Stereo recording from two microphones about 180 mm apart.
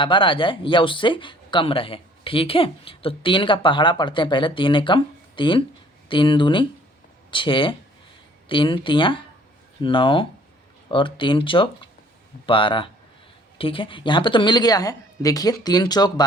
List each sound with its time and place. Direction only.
0.0 s speech: 30° left (ahead or behind)